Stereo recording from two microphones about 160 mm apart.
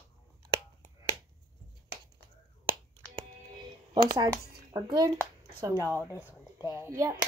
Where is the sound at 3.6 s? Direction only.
25° right (ahead or behind).